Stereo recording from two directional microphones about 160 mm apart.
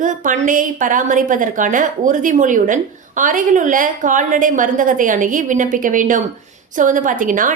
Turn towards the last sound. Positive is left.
turn(degrees=-55)  # may be behind; listen again after turning